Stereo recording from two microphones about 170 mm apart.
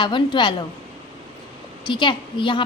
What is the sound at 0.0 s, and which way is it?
Speech, 30° left (ahead or behind).